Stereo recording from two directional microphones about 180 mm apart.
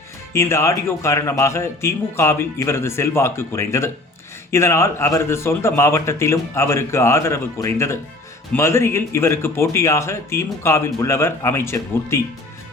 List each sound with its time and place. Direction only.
0.3 s speech: 15° left (ahead or behind)